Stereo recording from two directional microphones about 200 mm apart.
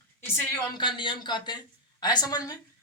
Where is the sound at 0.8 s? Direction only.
25° left (ahead or behind).